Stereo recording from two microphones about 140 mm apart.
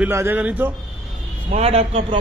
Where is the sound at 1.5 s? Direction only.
50° right (ahead or behind).